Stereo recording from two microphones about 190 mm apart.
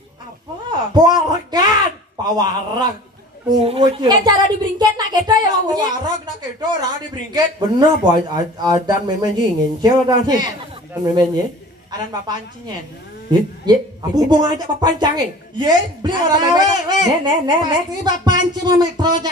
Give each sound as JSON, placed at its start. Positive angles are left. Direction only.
{"t": 0.7, "sound": "a sound", "side_deg": -25}
{"t": 3.6, "sound": "speech", "side_deg": -30}
{"t": 7.6, "sound": "speech", "side_deg": -20}